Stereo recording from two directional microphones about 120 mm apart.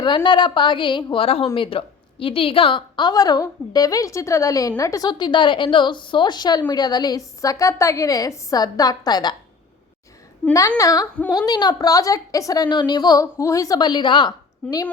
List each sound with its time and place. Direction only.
0.0 s a woman's voice: 40° left (ahead or behind)
10.8 s a woman's voice: 30° left (ahead or behind)
12.6 s a woman's voice: 40° left (ahead or behind)